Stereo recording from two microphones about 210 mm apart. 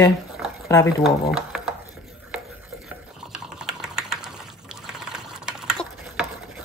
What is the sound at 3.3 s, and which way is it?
Typing, 5° right (ahead or behind).